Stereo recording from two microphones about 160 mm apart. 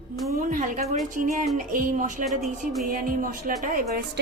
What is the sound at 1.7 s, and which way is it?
Speech, 55° right (ahead or behind).